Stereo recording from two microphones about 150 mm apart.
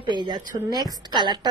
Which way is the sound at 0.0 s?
30° right (ahead or behind).